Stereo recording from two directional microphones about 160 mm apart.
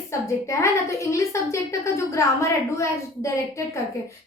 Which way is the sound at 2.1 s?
20° left (ahead or behind).